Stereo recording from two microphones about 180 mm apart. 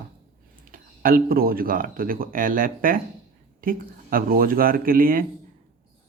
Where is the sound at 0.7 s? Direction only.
50° right (ahead or behind).